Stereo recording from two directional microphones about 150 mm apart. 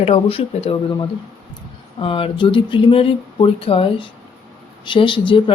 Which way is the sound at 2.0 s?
35° left (ahead or behind).